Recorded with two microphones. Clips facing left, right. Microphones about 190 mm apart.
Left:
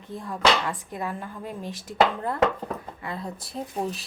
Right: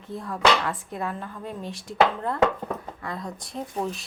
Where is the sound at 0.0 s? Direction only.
Centre (ahead or behind).